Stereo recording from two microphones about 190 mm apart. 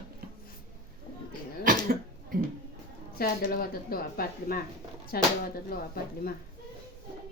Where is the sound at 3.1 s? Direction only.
50° left (ahead or behind).